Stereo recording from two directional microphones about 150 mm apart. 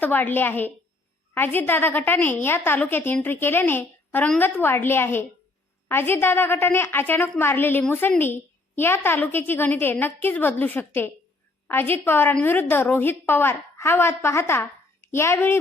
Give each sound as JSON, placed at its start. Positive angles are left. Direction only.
{"t": 0.0, "sound": "a woman's voice", "side_deg": 10}